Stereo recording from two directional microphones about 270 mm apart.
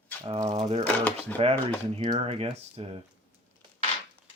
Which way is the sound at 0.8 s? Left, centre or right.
Centre.